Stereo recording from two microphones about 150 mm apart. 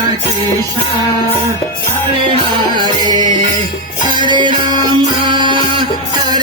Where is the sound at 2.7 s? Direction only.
30° right (ahead or behind).